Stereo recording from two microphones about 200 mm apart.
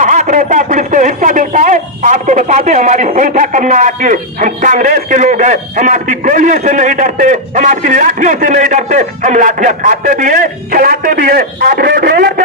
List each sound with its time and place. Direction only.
0.0 s a man's voice: 40° right (ahead or behind)